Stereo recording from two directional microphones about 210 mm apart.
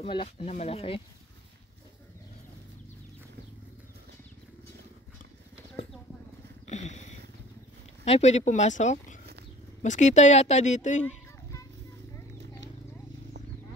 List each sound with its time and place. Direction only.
0.0 s speech: 25° left (ahead or behind)
6.7 s dog: 35° left (ahead or behind)
8.0 s speech: 30° left (ahead or behind)